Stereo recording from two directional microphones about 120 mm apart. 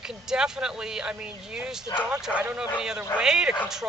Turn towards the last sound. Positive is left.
turn(degrees=-5)  # may be behind; listen again after turning